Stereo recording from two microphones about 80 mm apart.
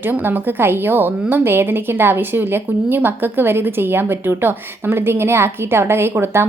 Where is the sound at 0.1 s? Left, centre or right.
Right.